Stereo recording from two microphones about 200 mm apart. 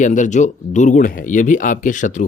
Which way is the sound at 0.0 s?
40° left (ahead or behind).